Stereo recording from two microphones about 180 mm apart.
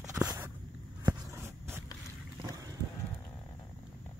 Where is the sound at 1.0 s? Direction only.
10° right (ahead or behind).